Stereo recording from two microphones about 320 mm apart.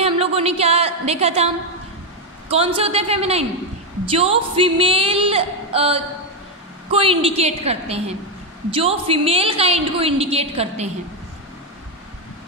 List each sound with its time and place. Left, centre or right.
0.0 s a woman's voice: centre